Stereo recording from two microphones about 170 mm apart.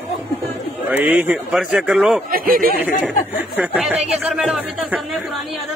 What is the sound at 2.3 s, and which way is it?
Speech, 60° right (ahead or behind).